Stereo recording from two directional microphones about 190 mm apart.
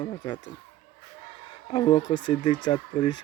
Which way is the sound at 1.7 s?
25° left (ahead or behind).